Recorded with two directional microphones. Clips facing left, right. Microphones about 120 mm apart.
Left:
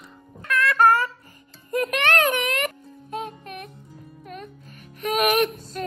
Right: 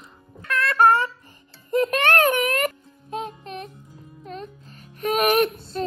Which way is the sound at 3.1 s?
25° right (ahead or behind).